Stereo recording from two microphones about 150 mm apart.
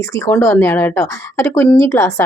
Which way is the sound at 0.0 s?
20° left (ahead or behind).